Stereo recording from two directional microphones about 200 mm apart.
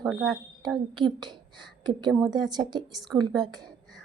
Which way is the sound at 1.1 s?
20° right (ahead or behind).